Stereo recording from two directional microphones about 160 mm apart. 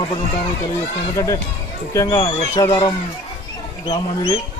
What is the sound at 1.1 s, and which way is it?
A man's voice, 20° left (ahead or behind).